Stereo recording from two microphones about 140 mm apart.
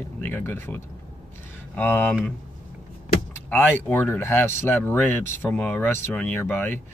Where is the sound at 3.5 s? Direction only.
10° left (ahead or behind).